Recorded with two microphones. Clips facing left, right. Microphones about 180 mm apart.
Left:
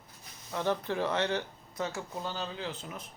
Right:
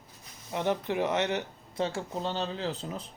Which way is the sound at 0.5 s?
20° right (ahead or behind).